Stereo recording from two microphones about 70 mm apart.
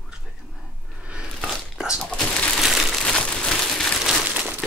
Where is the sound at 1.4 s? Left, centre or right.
Centre.